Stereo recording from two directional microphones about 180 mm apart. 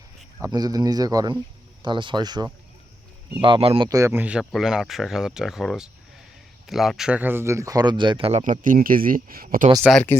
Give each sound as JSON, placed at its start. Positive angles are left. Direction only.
{"t": 0.4, "sound": "speech", "side_deg": -20}
{"t": 8.4, "sound": "speech", "side_deg": -50}